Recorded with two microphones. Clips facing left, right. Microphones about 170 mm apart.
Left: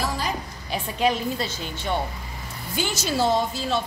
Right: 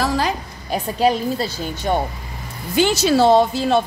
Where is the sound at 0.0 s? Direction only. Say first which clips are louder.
Right 8 dB; 90° right.